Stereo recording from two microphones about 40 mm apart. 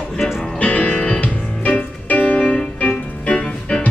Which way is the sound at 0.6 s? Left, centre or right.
Left.